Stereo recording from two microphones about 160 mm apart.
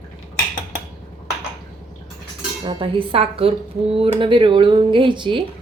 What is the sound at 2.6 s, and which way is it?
Speech, 30° right (ahead or behind).